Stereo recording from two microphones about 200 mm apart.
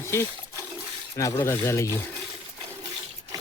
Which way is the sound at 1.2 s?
15° left (ahead or behind).